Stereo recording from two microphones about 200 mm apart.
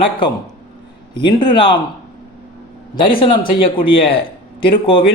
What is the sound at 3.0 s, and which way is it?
A man's voice, 25° left (ahead or behind).